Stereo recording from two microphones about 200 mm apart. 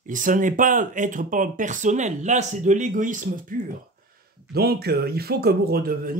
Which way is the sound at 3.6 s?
55° right (ahead or behind).